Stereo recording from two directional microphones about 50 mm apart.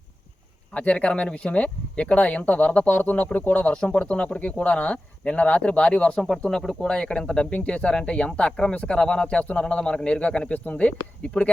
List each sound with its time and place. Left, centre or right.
0.7 s speech: left
6.1 s speech: centre; by 11.4 s left